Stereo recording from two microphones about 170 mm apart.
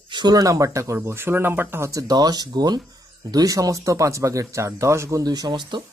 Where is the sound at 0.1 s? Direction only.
25° right (ahead or behind).